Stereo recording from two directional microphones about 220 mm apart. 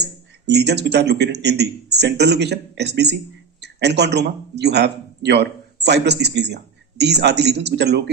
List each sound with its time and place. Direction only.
0.0 s a man's voice: 50° right (ahead or behind)